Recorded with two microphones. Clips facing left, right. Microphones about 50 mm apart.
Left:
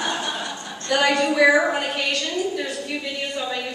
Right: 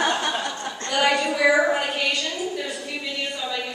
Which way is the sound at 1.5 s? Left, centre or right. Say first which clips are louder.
Even; centre.